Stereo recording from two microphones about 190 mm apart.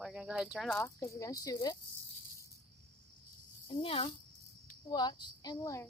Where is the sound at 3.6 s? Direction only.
30° left (ahead or behind).